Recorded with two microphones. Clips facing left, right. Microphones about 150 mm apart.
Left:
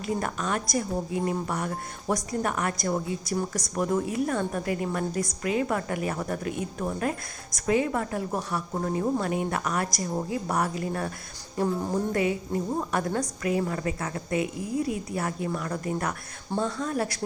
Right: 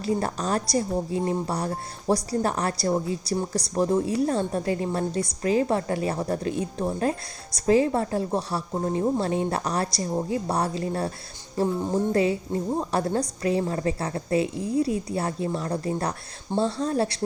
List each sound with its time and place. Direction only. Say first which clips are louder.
0.0 s a woman's voice: right 3 dB; 35° right (ahead or behind)